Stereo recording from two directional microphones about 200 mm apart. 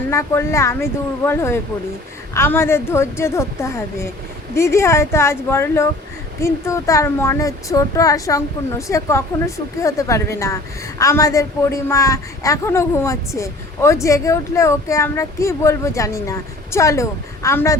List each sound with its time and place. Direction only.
0.1 s a woman's voice: 15° left (ahead or behind)